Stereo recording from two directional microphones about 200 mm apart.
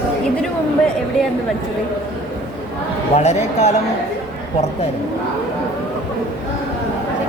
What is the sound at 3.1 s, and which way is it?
Speech, 35° left (ahead or behind).